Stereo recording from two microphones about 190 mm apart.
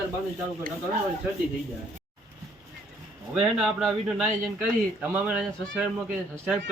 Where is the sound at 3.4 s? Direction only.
5° right (ahead or behind).